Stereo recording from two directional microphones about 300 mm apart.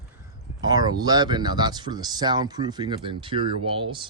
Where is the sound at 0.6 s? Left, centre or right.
Centre.